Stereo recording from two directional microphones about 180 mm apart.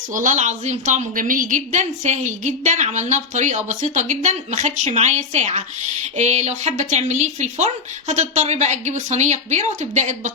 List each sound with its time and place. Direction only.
0.1 s a woman's voice: 45° right (ahead or behind)